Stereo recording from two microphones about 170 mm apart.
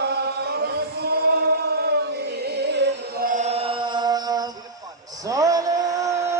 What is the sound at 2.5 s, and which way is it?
Music, 85° right.